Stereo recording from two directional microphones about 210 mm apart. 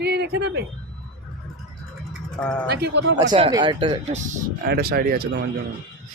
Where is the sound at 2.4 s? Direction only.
5° left (ahead or behind).